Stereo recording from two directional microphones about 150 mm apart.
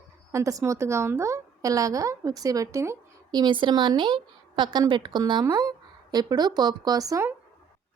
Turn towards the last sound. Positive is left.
turn(degrees=-20)  # may be behind; listen again after turning